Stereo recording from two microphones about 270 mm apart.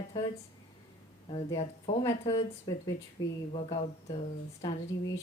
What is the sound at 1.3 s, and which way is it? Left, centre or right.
Speech, left.